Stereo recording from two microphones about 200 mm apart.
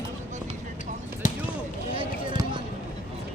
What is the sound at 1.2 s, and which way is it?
Basketball bounce, 40° left (ahead or behind).